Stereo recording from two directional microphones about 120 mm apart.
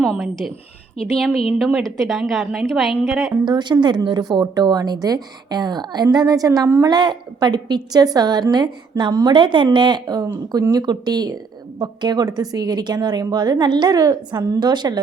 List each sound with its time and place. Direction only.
0.0 s a woman's voice: centre (ahead or behind)
1.5 s a woman's voice: centre (ahead or behind)
3.4 s a woman's voice: 40° right (ahead or behind)
6.9 s a woman's voice: 35° right (ahead or behind)